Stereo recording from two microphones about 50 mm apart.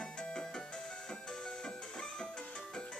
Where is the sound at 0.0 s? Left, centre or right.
Centre.